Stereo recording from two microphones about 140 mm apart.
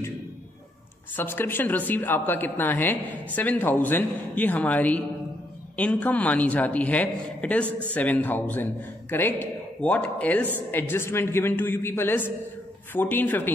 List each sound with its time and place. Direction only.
1.1 s a woman's voice: 15° left (ahead or behind)